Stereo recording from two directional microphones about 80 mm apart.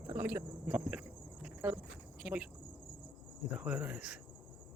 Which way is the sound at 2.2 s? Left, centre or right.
Centre.